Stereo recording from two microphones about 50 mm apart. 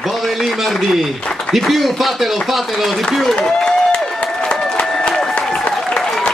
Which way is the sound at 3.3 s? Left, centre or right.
Centre.